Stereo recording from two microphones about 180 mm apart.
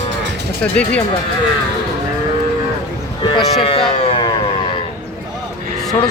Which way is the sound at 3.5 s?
30° left (ahead or behind).